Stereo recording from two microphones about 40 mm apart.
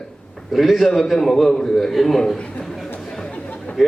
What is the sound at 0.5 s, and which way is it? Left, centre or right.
A man's voice, centre.